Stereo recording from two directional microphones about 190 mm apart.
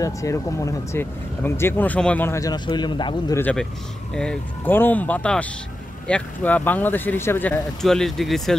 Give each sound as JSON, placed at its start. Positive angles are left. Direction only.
{"t": 0.0, "sound": "speech", "side_deg": 15}
{"t": 3.3, "sound": "speech", "side_deg": 10}